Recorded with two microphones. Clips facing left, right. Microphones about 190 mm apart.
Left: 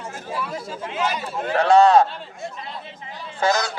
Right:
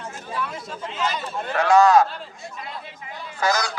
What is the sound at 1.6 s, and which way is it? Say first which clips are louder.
Speech: left 1 dB; 30° left (ahead or behind).